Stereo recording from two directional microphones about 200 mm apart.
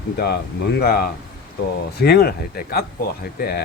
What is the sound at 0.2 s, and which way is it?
Speech, 55° left (ahead or behind).